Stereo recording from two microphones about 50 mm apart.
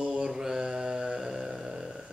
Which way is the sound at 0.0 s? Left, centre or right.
Right.